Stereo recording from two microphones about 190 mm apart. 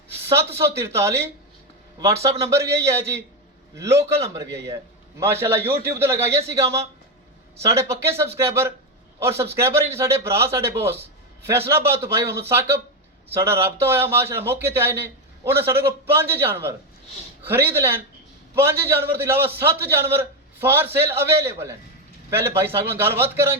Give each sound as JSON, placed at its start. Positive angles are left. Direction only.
{"t": 0.6, "sound": "a man's voice", "side_deg": -15}
{"t": 2.4, "sound": "a man's voice", "side_deg": -15}